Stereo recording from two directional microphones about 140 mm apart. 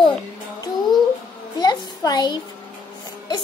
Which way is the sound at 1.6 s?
30° left (ahead or behind).